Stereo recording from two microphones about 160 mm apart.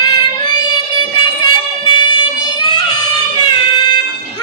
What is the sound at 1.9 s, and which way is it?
Child singing, 30° left (ahead or behind).